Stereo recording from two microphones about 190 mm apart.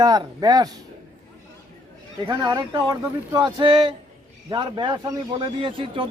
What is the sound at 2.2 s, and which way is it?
Speech, 20° right (ahead or behind).